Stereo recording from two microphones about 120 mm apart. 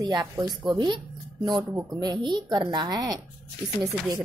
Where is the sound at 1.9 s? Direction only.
35° right (ahead or behind).